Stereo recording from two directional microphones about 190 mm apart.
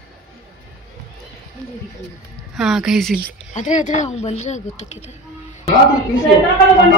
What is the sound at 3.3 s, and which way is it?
Speech, 40° left (ahead or behind).